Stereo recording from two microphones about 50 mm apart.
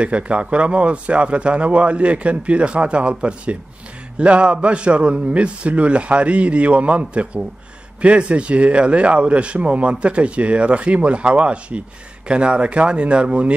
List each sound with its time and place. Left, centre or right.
0.0 s speech: right